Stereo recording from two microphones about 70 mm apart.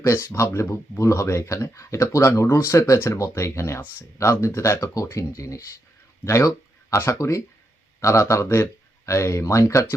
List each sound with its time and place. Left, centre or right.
0.3 s speech: left